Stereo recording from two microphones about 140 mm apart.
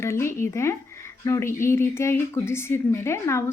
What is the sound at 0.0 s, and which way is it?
Speech, 20° left (ahead or behind).